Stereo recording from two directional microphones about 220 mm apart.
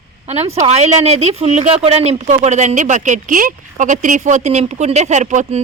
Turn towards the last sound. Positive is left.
turn(degrees=-35)  # may be behind; listen again after turning